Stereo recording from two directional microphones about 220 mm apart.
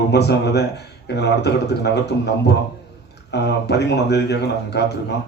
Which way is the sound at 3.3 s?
50° left (ahead or behind).